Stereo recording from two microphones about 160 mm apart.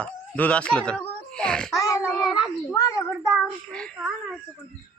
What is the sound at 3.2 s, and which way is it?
Child singing, 5° right (ahead or behind).